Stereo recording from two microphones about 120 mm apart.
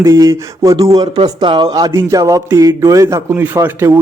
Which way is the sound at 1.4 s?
40° right (ahead or behind).